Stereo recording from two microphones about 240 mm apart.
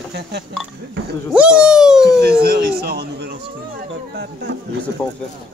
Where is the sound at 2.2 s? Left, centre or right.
Right.